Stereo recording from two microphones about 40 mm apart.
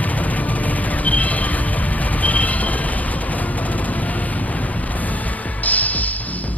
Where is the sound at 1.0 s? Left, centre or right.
Left.